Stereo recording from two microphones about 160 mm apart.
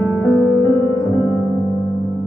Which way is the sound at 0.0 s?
10° left (ahead or behind).